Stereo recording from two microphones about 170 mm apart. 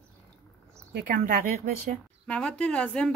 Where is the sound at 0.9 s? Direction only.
55° right (ahead or behind).